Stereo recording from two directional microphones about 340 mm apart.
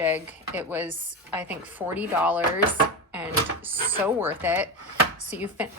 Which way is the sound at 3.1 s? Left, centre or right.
Centre.